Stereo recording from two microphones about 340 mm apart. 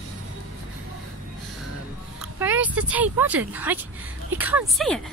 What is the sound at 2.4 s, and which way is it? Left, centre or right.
Speech, centre.